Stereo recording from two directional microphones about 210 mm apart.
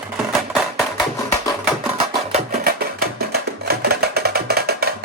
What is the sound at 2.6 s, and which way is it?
Music, 50° right (ahead or behind).